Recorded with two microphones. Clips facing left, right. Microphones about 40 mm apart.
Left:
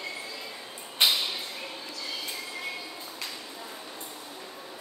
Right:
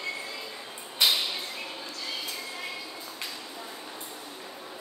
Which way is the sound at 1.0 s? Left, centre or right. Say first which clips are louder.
Even; left.